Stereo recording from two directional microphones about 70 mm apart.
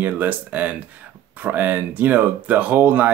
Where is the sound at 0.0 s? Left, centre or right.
Right.